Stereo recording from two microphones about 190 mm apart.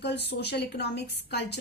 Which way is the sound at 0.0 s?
60° left (ahead or behind).